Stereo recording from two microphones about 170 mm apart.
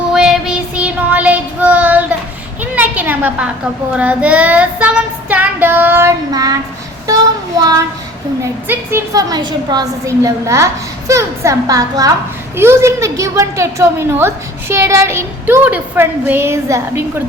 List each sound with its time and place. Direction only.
0.1 s child singing: 5° right (ahead or behind)
2.7 s a sound: 10° right (ahead or behind)
3.9 s child singing: 10° right (ahead or behind)
8.6 s a woman's voice: 15° right (ahead or behind)